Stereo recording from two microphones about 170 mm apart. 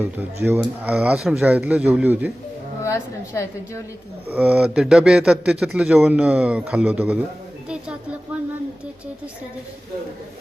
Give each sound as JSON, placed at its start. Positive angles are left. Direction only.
{"t": 0.0, "sound": "speech", "side_deg": -15}
{"t": 2.8, "sound": "a woman's voice", "side_deg": 15}
{"t": 4.4, "sound": "a man's voice", "side_deg": -5}
{"t": 7.7, "sound": "a sound", "side_deg": -5}